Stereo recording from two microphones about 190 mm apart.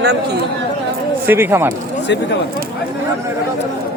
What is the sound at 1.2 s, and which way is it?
Speech, 10° right (ahead or behind).